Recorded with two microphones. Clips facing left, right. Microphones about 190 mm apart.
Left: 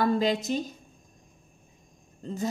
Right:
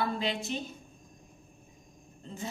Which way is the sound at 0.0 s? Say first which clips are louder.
Left 7 dB; 40° left (ahead or behind).